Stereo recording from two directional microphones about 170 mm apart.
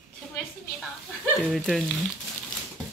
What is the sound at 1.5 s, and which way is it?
Speech, centre (ahead or behind).